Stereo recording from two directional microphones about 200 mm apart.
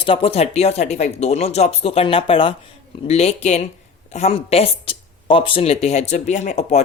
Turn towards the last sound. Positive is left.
turn(degrees=35)  # may be behind; listen again after turning